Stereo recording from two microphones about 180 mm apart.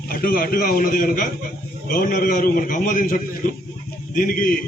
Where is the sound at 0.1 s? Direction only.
50° left (ahead or behind).